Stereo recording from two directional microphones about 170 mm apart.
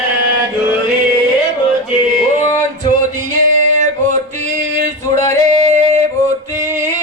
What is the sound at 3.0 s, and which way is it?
Male singing, 45° right (ahead or behind).